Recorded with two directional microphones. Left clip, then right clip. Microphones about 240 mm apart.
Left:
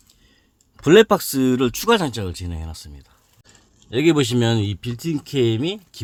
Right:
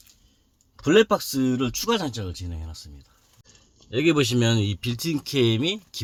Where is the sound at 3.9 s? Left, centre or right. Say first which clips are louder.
Left 3 dB; centre.